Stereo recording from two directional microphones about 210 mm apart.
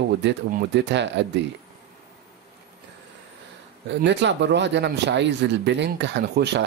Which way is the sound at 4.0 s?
55° right (ahead or behind).